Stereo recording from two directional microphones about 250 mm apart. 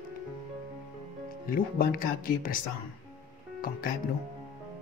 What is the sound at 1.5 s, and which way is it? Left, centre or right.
Speech, left.